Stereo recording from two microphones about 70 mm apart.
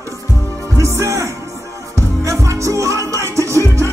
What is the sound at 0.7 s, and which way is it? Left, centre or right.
Music, right.